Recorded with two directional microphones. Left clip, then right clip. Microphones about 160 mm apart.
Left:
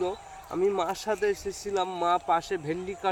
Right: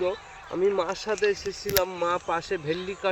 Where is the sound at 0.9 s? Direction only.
35° left (ahead or behind).